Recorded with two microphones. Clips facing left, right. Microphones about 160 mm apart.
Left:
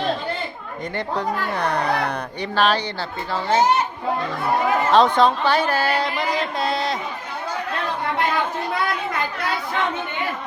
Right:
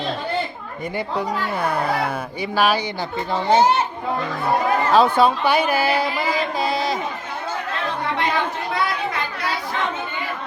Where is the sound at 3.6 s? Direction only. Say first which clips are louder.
Left 1 dB; 30° right (ahead or behind).